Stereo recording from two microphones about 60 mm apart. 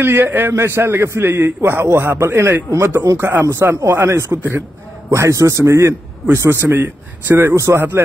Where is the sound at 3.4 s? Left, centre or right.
Right.